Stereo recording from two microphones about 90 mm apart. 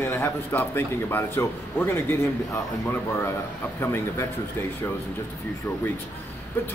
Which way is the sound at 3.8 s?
25° left (ahead or behind).